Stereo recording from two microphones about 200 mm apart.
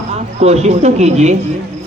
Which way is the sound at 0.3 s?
35° right (ahead or behind).